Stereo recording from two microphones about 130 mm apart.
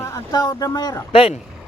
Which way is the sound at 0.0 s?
25° left (ahead or behind).